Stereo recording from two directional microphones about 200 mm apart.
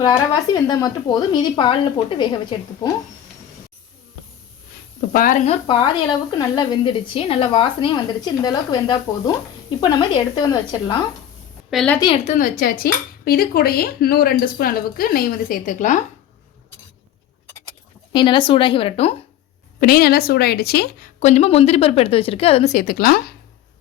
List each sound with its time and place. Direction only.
0.0 s a woman's voice: 20° left (ahead or behind)
4.9 s speech: 45° left (ahead or behind)
5.6 s a woman's voice: 25° left (ahead or behind)
11.7 s a woman's voice: centre (ahead or behind)
11.9 s a woman's voice: 25° left (ahead or behind)
12.4 s speech: 45° left (ahead or behind)
18.1 s a woman's voice: 25° left (ahead or behind)
19.8 s speech: 50° left (ahead or behind)
21.2 s speech: 35° left (ahead or behind)